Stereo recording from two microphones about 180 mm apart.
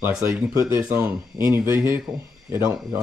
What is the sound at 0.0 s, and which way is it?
Speech, 15° right (ahead or behind).